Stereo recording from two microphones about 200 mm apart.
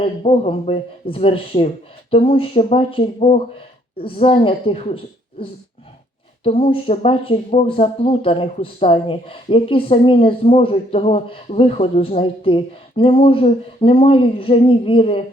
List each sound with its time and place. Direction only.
0.0 s speech: 30° left (ahead or behind)